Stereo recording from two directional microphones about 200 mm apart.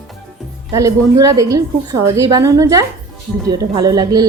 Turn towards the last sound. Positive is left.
turn(degrees=-20)  # may be behind; listen again after turning